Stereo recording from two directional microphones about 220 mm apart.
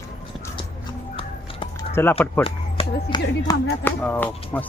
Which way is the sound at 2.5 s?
25° left (ahead or behind).